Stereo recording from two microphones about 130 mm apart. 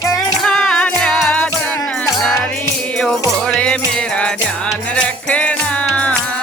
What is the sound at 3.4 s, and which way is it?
Music, 5° left (ahead or behind).